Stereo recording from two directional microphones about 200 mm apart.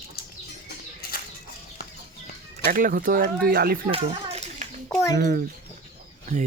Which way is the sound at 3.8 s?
30° right (ahead or behind).